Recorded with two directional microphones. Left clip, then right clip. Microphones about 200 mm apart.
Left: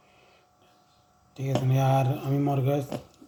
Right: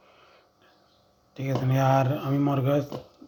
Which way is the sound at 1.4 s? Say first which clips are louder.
Right 2 dB; centre (ahead or behind).